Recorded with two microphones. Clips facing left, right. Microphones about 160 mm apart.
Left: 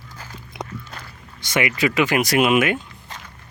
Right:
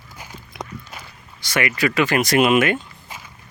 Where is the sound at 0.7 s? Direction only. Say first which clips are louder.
Left 1 dB; 10° right (ahead or behind).